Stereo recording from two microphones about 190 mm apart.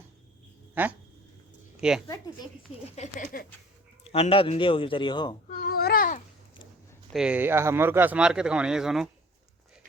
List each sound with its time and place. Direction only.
0.7 s speech: 10° right (ahead or behind)
2.8 s a sound: 35° left (ahead or behind)
4.0 s a man's voice: 30° left (ahead or behind)
5.5 s babbling: 50° left (ahead or behind)
7.1 s speech: 5° right (ahead or behind)